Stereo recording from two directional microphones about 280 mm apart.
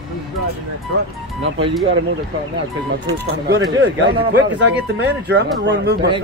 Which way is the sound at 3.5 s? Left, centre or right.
Right.